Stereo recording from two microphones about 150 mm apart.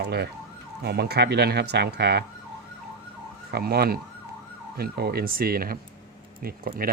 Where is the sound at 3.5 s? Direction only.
90° right.